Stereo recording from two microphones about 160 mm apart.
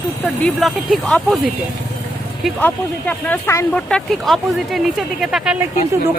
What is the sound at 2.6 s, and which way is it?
Speech, 10° left (ahead or behind).